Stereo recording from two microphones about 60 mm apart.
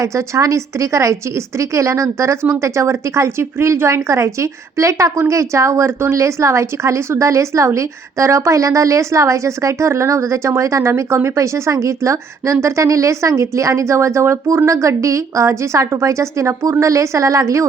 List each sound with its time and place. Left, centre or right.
0.0 s a woman's voice: right